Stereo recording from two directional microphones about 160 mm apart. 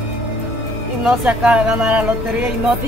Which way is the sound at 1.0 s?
5° right (ahead or behind).